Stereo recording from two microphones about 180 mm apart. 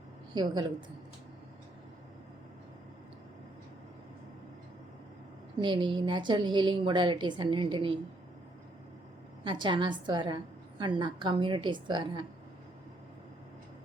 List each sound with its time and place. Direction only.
0.3 s a woman's voice: 25° right (ahead or behind)
5.5 s a woman's voice: 25° right (ahead or behind)
9.4 s a woman's voice: 25° right (ahead or behind)